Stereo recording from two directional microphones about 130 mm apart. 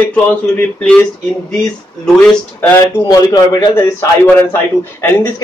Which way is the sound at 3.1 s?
30° left (ahead or behind).